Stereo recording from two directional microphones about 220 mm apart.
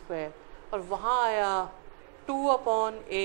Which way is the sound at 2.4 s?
30° right (ahead or behind).